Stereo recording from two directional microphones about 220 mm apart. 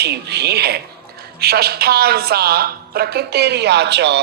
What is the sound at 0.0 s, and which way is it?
A woman's voice, 50° right (ahead or behind).